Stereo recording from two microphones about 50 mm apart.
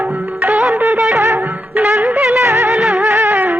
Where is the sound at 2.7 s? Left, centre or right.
Centre.